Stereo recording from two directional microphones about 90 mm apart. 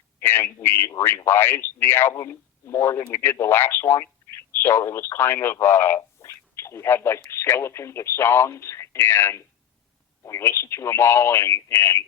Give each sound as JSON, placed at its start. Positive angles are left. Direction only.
{"t": 0.2, "sound": "speech", "side_deg": 25}
{"t": 6.2, "sound": "a sound", "side_deg": 30}
{"t": 7.3, "sound": "speech", "side_deg": 30}